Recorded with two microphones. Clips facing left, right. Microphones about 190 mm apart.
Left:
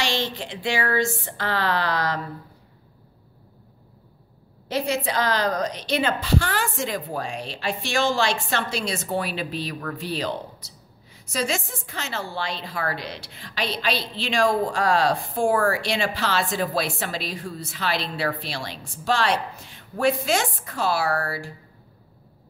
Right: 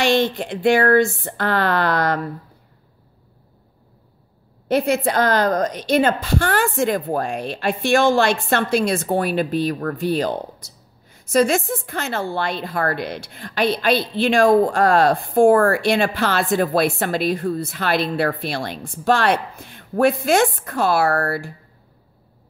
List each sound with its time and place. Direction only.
0.0 s a woman's voice: 55° right (ahead or behind)
4.6 s a woman's voice: 55° right (ahead or behind)